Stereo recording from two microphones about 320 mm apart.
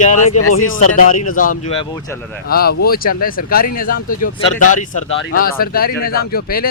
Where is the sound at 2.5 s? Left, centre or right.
Left.